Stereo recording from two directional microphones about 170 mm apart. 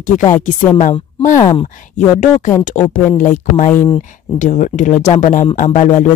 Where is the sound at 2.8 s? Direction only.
35° left (ahead or behind).